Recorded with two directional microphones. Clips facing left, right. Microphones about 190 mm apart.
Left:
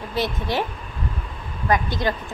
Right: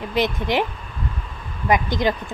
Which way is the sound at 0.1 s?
15° right (ahead or behind).